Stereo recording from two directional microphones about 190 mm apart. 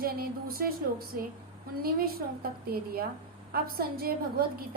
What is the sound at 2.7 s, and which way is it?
A woman's voice, 50° right (ahead or behind).